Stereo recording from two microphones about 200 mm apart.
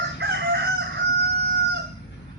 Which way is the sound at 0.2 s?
60° right (ahead or behind).